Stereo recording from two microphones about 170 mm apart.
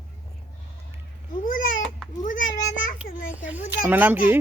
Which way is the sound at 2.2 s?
50° left (ahead or behind).